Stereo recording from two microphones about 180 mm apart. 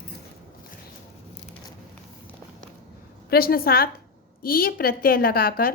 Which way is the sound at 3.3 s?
55° left (ahead or behind).